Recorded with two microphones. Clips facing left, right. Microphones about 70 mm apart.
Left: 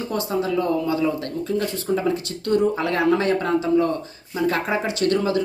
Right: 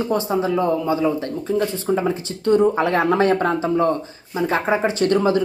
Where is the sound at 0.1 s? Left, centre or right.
Right.